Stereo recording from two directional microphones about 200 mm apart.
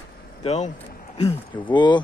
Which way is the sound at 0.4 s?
35° left (ahead or behind).